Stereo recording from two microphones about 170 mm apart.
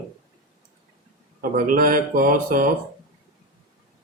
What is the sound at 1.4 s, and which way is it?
Speech, 55° right (ahead or behind).